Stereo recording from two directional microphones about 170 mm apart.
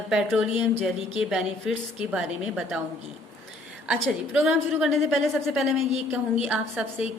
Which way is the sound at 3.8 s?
5° right (ahead or behind).